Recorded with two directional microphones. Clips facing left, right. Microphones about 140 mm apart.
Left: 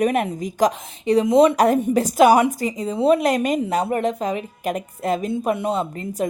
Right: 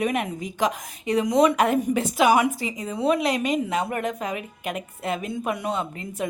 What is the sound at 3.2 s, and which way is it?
A woman's voice, 45° left (ahead or behind).